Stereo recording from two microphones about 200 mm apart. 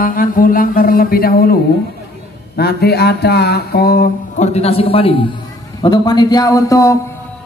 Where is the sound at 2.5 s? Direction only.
50° left (ahead or behind).